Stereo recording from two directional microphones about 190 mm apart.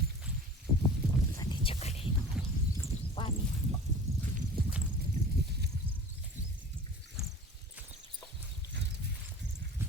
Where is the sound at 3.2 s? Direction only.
25° left (ahead or behind).